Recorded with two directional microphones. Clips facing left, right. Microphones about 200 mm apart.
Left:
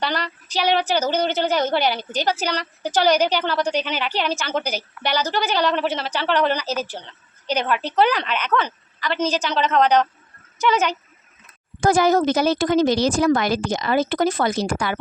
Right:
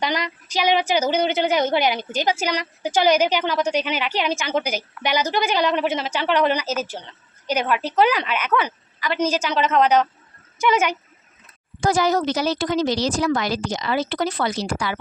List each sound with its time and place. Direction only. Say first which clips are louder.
0.0 s a woman's voice: right 1 dB; 10° right (ahead or behind)
11.8 s a woman's voice: left 3 dB; 50° left (ahead or behind)